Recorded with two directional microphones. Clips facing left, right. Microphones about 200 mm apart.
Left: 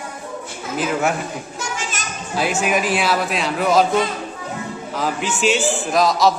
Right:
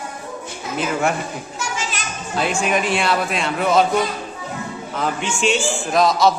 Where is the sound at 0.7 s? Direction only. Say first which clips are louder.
Left 1 dB; centre (ahead or behind).